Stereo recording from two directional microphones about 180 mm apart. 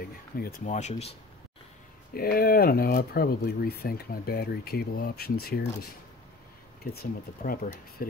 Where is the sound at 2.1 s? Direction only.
55° left (ahead or behind).